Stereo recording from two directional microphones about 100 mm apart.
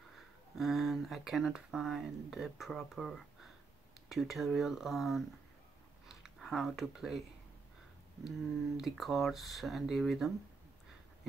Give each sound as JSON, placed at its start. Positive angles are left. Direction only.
{"t": 0.6, "sound": "speech", "side_deg": 0}
{"t": 8.7, "sound": "speech", "side_deg": 0}